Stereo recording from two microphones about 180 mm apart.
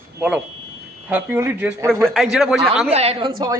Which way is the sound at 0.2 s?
5° right (ahead or behind).